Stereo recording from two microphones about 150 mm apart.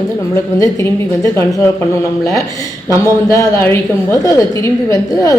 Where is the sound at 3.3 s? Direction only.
20° left (ahead or behind).